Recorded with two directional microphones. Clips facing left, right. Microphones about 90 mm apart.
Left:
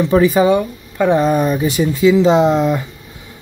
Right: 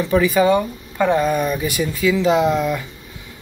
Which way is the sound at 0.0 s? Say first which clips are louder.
Left 4 dB; 30° left (ahead or behind).